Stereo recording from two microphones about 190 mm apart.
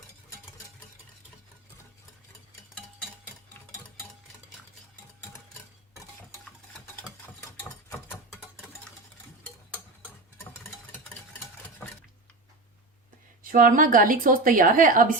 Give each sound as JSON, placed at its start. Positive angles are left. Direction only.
{"t": 13.5, "sound": "a woman's voice", "side_deg": -45}